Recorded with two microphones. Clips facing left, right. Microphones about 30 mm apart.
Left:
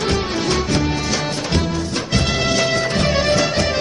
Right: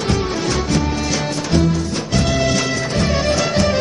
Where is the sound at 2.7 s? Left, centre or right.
Left.